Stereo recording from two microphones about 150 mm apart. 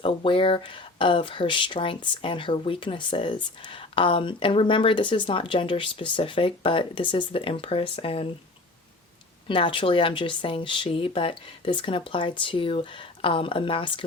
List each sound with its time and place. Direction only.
0.0 s speech: 35° left (ahead or behind)
9.5 s speech: 35° left (ahead or behind)